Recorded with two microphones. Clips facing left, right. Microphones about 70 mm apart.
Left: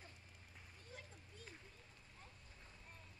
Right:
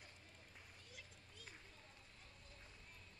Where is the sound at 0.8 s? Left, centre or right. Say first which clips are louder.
Left 4 dB; left.